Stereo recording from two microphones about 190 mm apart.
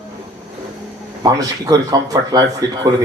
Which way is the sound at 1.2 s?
20° right (ahead or behind).